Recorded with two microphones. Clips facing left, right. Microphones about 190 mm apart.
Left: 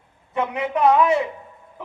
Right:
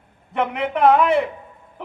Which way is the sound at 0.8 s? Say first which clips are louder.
Right 1 dB; 60° right (ahead or behind).